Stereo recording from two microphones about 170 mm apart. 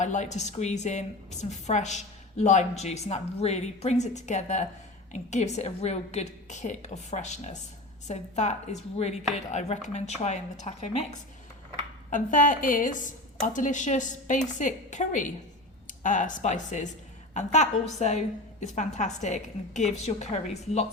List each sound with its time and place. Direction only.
0.0 s a woman's voice: 45° left (ahead or behind)
12.1 s a woman's voice: 50° left (ahead or behind)